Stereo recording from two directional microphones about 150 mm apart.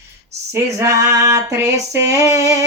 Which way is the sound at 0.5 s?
20° right (ahead or behind).